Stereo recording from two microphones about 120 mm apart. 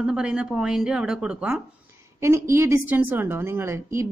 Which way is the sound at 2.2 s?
20° right (ahead or behind).